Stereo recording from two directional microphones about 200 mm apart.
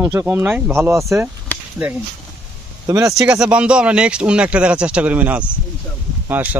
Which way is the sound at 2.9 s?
15° right (ahead or behind).